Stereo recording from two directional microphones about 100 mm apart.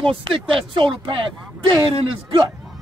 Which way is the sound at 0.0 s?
60° right (ahead or behind).